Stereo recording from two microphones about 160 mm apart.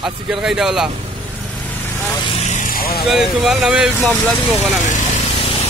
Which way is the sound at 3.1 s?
Centre (ahead or behind).